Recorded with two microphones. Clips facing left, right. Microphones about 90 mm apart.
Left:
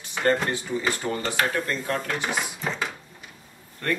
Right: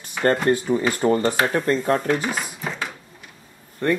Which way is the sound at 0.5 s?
45° right (ahead or behind).